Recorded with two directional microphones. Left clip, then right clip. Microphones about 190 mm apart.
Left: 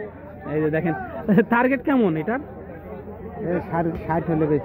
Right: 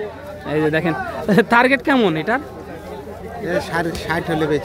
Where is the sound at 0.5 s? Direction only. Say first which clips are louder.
Right 4 dB; 15° right (ahead or behind).